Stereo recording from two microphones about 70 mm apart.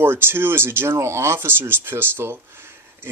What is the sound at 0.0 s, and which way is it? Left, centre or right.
Speech, right.